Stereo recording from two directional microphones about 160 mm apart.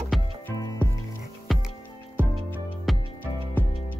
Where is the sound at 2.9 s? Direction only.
Centre (ahead or behind).